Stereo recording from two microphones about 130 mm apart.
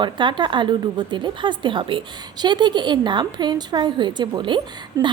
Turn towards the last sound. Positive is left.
turn(degrees=-40)  # may be behind; listen again after turning